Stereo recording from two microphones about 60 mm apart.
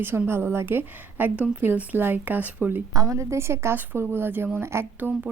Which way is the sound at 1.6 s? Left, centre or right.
Right.